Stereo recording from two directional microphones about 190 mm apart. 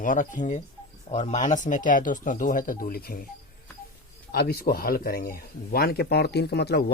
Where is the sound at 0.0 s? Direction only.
45° left (ahead or behind).